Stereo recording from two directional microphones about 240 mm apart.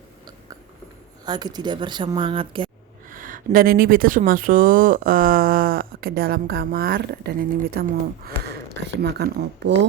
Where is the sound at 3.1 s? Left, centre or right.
Right.